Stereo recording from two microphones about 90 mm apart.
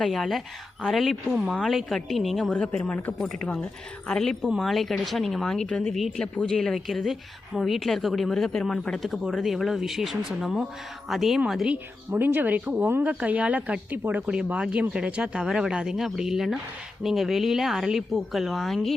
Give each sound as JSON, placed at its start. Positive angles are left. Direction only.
{"t": 0.0, "sound": "a woman's voice", "side_deg": 0}
{"t": 12.1, "sound": "speech", "side_deg": -20}